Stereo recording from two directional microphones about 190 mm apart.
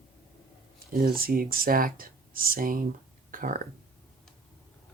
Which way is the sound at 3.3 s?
45° right (ahead or behind).